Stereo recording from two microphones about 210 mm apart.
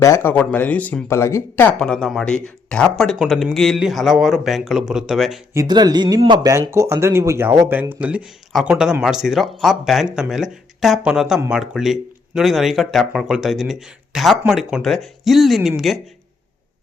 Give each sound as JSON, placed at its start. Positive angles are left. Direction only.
{"t": 0.0, "sound": "speech", "side_deg": 10}
{"t": 5.5, "sound": "speech", "side_deg": -20}